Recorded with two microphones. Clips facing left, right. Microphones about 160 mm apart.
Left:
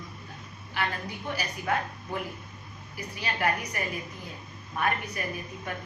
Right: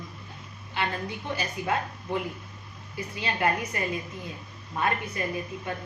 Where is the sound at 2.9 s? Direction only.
25° right (ahead or behind).